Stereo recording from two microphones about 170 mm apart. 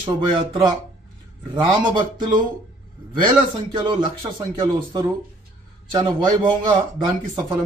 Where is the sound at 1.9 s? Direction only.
25° right (ahead or behind).